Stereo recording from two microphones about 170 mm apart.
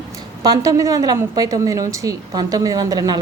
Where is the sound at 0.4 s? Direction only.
20° right (ahead or behind).